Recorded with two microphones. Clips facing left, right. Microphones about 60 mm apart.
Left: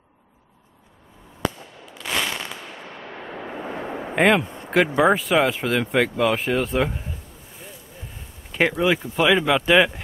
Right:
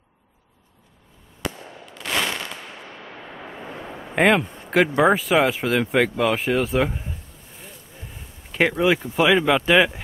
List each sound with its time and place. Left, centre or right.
2.0 s a sound: centre
3.3 s vehicle: left
4.1 s speech: centre
8.5 s speech: centre